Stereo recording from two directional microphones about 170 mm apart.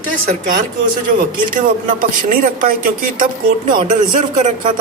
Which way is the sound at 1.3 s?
55° right (ahead or behind).